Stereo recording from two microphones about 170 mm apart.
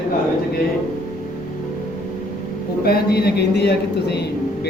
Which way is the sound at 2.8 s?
65° left (ahead or behind).